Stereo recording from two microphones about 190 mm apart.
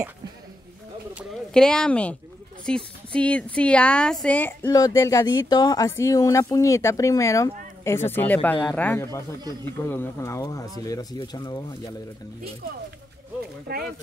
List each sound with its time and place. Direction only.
1.1 s a sound: centre (ahead or behind)
2.6 s speech: 5° left (ahead or behind)
13.7 s speech: 55° right (ahead or behind)